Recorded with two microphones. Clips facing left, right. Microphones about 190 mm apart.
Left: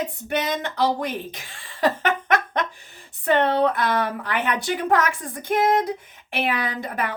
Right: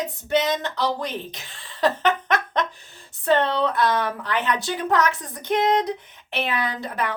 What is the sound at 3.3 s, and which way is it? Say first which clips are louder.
A woman's voice: left 1 dB; 55° left (ahead or behind).